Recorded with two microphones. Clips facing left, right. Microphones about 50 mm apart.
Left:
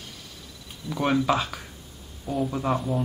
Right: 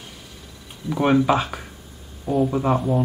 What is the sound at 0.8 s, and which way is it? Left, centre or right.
Speech, centre.